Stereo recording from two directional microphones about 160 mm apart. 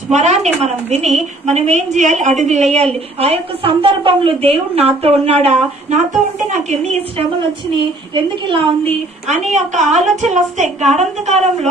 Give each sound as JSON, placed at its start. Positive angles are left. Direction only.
{"t": 0.1, "sound": "a woman's voice", "side_deg": -45}
{"t": 8.1, "sound": "a woman's voice", "side_deg": -35}